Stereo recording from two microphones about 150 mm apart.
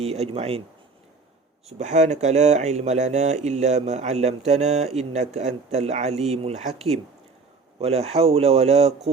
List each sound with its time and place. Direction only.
0.0 s speech: 40° right (ahead or behind)
1.8 s speech: 50° right (ahead or behind)